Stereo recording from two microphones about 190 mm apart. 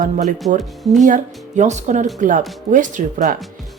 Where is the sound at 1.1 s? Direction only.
40° right (ahead or behind).